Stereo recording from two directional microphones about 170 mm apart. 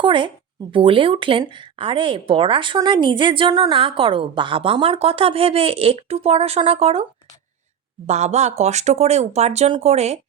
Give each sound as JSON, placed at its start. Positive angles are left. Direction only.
{"t": 0.0, "sound": "a woman's voice", "side_deg": -30}
{"t": 8.0, "sound": "a woman's voice", "side_deg": -40}